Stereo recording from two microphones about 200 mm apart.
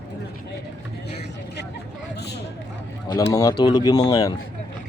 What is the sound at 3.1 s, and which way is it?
Speech, 15° left (ahead or behind).